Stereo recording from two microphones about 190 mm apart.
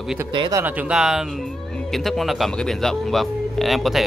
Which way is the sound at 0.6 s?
10° right (ahead or behind).